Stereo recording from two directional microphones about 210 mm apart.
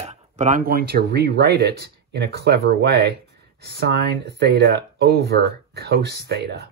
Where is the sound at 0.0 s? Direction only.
35° right (ahead or behind).